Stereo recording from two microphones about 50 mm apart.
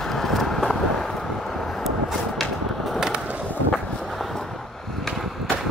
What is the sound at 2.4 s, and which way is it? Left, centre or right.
Skateboard, centre.